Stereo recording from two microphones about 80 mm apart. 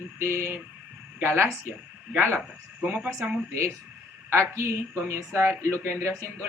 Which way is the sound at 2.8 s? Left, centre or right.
Right.